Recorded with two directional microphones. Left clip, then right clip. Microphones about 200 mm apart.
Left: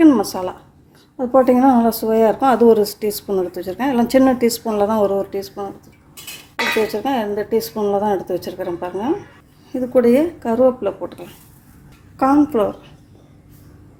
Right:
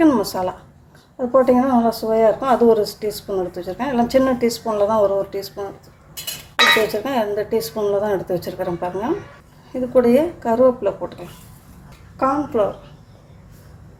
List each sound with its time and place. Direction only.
0.0 s a sound: 15° left (ahead or behind)
1.1 s speech: 25° left (ahead or behind)
6.8 s a woman's voice: 15° left (ahead or behind)
9.9 s speech: 25° left (ahead or behind)
12.1 s a woman's voice: 35° left (ahead or behind)